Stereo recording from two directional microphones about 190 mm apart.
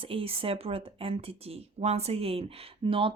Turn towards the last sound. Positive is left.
turn(degrees=-30)  # may be behind; listen again after turning